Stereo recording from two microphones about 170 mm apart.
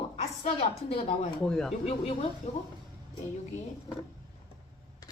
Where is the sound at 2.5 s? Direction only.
40° left (ahead or behind).